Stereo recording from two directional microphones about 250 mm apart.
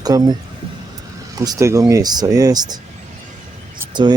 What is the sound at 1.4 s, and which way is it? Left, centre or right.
Speech, centre.